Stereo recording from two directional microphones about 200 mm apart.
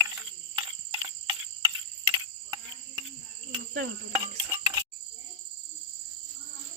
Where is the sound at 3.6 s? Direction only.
55° right (ahead or behind).